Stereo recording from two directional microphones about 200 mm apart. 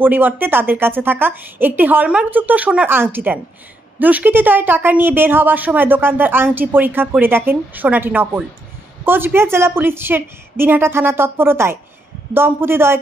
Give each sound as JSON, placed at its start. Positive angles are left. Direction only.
{"t": 0.0, "sound": "a woman's voice", "side_deg": -10}